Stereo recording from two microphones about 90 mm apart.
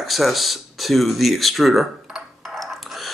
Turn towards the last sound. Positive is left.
turn(degrees=0)  # may be behind; listen again after turning